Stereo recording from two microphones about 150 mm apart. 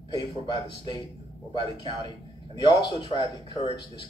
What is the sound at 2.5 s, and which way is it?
Speech, 30° left (ahead or behind).